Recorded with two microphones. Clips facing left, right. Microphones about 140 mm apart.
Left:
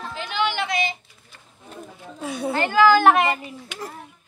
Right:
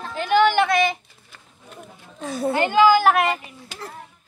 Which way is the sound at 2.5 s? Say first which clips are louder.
Right 1 dB; 20° right (ahead or behind).